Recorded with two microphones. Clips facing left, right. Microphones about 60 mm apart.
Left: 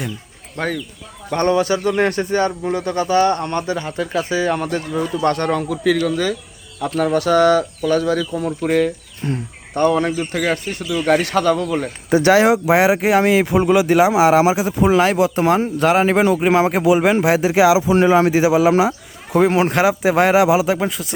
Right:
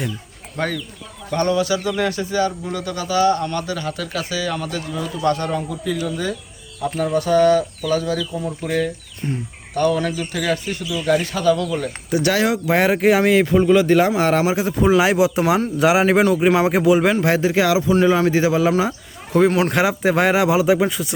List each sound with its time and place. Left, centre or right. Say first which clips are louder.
0.6 s speech: left 1 dB; centre
1.3 s speech: left 2 dB; left
9.7 s speech: left 3 dB; left
11.5 s speech: left 2 dB; left
12.2 s speech: left 6 dB; left
12.7 s speech: right 2 dB; centre
16.2 s speech: left 1 dB; centre
17.9 s speech: left 2 dB; left
18.8 s a sound: left 4 dB; centre
19.7 s speech: left 2 dB; centre